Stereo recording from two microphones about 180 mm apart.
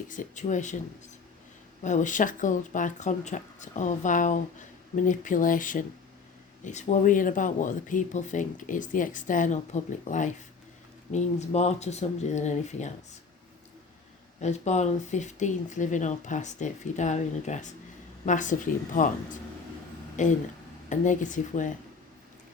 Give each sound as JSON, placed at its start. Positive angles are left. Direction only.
{"t": 0.1, "sound": "speech", "side_deg": 45}
{"t": 1.8, "sound": "speech", "side_deg": 45}
{"t": 14.4, "sound": "speech", "side_deg": 40}
{"t": 20.2, "sound": "speech", "side_deg": 40}